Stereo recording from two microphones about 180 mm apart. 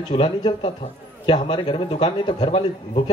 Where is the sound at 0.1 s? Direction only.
30° left (ahead or behind).